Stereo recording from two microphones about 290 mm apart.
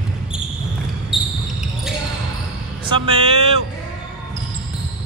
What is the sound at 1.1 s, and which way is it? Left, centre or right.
Basketball bounce, centre.